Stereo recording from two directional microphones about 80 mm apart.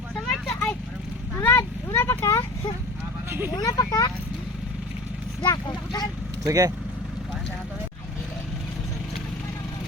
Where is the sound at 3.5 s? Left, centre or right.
Left.